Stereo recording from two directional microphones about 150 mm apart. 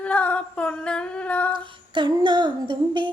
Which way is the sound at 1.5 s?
35° right (ahead or behind).